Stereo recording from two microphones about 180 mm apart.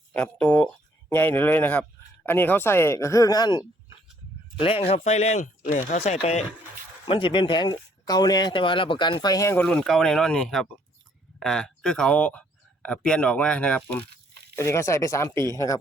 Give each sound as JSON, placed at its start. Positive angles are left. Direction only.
{"t": 0.1, "sound": "speech", "side_deg": 10}
{"t": 7.0, "sound": "speech", "side_deg": 25}
{"t": 9.6, "sound": "speech", "side_deg": 5}